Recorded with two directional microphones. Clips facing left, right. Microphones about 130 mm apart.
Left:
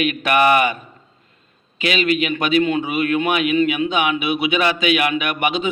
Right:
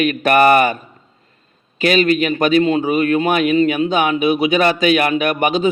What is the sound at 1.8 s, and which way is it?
A man's voice, 45° right (ahead or behind).